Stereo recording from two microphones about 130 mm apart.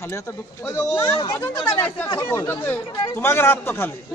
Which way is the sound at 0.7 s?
20° left (ahead or behind).